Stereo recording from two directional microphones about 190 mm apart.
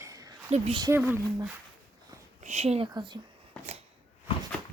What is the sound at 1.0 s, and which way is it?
Speech, 10° right (ahead or behind).